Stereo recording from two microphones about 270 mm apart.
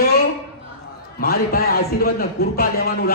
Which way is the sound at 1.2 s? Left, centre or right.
Left.